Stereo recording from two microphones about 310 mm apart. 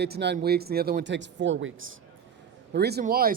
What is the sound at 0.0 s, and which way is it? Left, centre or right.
Speech, right.